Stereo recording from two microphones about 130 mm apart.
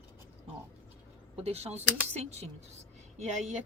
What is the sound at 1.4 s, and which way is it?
Speech, 50° right (ahead or behind).